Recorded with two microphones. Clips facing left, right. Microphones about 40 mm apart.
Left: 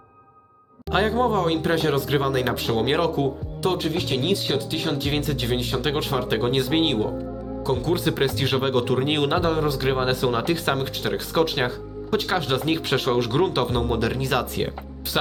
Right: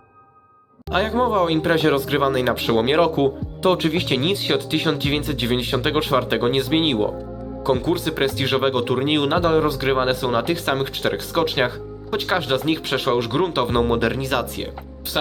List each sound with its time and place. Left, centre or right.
0.9 s speech: centre
1.1 s speech: centre
2.6 s speech: right
5.1 s speech: right
7.6 s speech: right
8.1 s speech: centre
12.5 s speech: centre
13.7 s speech: right
13.9 s speech: right
14.2 s speech: centre